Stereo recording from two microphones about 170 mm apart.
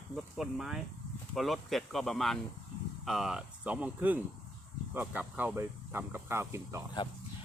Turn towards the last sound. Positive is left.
turn(degrees=30)  # may be behind; listen again after turning